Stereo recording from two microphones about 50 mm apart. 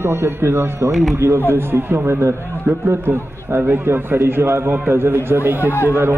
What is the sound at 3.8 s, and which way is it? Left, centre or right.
A man's voice, right.